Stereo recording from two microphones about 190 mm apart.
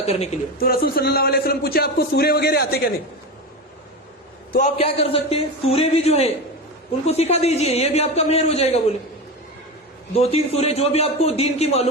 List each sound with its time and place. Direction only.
0.0 s a man's voice: 30° left (ahead or behind)
0.6 s a man's voice: 50° left (ahead or behind)
4.8 s a man's voice: 30° left (ahead or behind)
10.1 s a man's voice: 35° left (ahead or behind)